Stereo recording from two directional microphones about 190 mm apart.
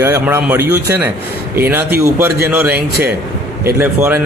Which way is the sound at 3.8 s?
10° right (ahead or behind).